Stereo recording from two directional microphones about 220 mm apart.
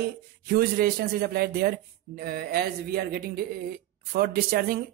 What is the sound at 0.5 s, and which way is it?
Speech, 45° right (ahead or behind).